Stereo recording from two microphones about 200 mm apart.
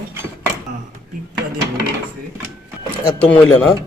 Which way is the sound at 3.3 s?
10° left (ahead or behind).